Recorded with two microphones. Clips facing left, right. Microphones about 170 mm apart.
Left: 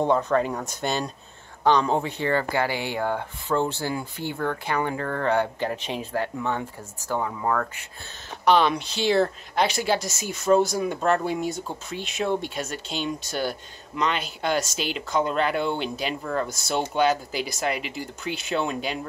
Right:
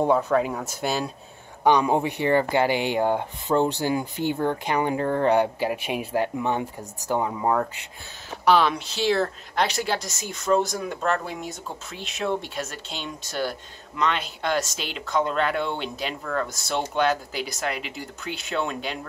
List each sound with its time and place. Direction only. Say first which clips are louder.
0.0 s speech: right 1 dB; 5° right (ahead or behind)
8.5 s speech: even; 5° right (ahead or behind)
11.2 s speech: left 6 dB; centre (ahead or behind)